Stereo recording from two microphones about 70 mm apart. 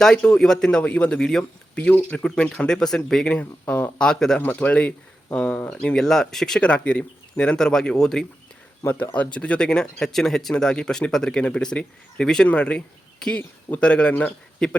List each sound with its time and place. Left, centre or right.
0.0 s speech: centre
3.2 s speech: centre
4.4 s speech: left
9.3 s speech: centre